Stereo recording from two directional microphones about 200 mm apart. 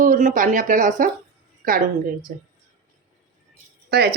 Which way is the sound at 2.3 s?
40° right (ahead or behind).